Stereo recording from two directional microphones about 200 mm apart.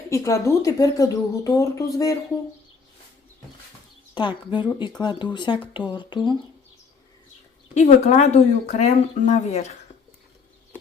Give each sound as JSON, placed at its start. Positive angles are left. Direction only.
{"t": 0.1, "sound": "speech", "side_deg": 15}
{"t": 4.1, "sound": "speech", "side_deg": 25}
{"t": 7.7, "sound": "speech", "side_deg": 35}